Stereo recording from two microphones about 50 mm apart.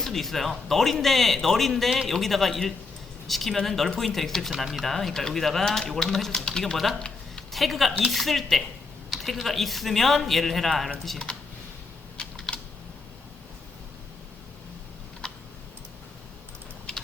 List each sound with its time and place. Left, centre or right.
0.0 s a man's voice: centre
7.5 s a man's voice: centre
12.1 s typing: centre
15.2 s typing: centre